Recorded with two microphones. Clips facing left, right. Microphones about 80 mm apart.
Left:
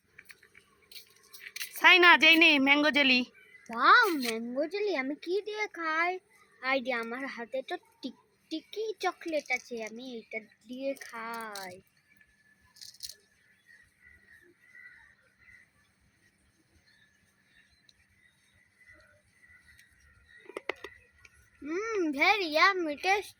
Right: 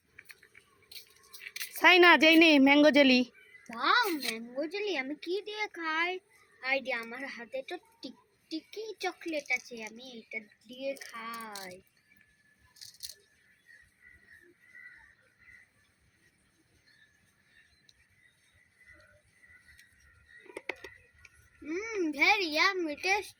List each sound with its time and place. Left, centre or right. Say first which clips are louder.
1.8 s a woman's voice: right 1 dB; centre
3.8 s a child's voice: left 6 dB; left
6.6 s a child's voice: left 3 dB; left
20.7 s whispering: left 4 dB; left
21.7 s a child's voice: left 2 dB; left
22.2 s speech: left 3 dB; left